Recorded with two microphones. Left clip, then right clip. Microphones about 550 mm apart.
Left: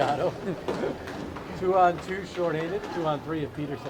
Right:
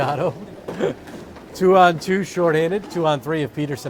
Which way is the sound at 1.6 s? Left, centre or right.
Right.